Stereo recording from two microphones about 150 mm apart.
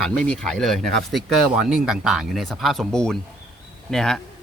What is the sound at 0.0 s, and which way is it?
Speech, 5° left (ahead or behind).